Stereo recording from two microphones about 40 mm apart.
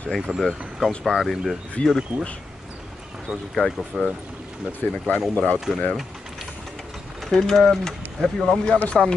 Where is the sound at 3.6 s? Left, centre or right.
Left.